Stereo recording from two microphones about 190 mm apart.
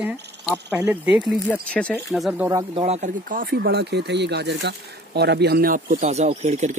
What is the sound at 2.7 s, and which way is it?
Speech, 35° right (ahead or behind).